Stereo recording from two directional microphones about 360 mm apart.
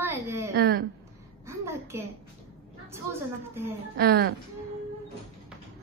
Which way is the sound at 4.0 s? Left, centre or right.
Right.